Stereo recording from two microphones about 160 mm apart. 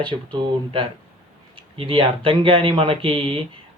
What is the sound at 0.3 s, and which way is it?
Speech, 30° right (ahead or behind).